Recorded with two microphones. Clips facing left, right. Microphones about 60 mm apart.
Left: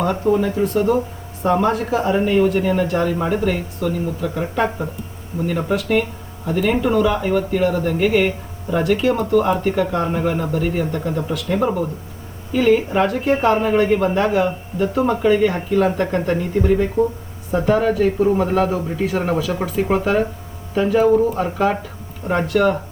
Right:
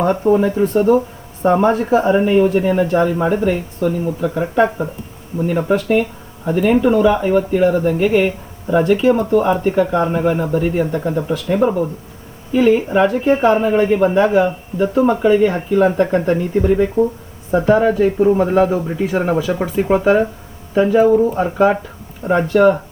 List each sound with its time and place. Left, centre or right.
0.0 s speech: right